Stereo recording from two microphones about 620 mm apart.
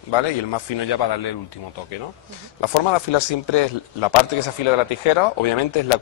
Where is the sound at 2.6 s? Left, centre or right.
Left.